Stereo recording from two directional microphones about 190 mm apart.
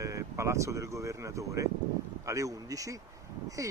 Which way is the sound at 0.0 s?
15° right (ahead or behind).